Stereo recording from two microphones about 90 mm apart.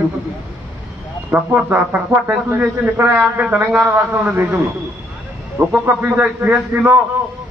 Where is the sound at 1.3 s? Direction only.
15° right (ahead or behind).